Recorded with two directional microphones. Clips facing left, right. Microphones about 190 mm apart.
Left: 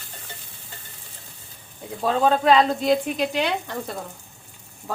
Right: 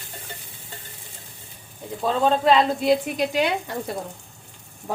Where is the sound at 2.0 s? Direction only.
5° left (ahead or behind).